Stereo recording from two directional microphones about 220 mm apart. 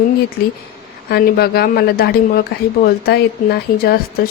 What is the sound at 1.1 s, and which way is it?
A woman's voice, 45° left (ahead or behind).